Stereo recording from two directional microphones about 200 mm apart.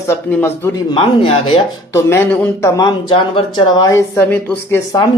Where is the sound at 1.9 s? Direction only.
15° left (ahead or behind).